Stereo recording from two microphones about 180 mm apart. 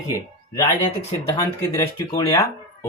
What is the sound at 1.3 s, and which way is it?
Speech, 20° left (ahead or behind).